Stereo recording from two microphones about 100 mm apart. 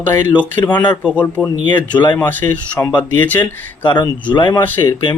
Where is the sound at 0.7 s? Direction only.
50° left (ahead or behind).